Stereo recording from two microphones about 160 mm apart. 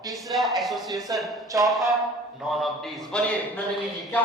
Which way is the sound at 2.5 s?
Centre (ahead or behind).